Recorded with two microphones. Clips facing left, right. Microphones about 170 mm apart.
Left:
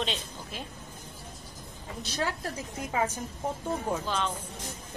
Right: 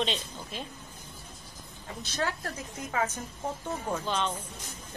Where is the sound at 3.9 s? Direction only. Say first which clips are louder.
Right 2 dB; 5° left (ahead or behind).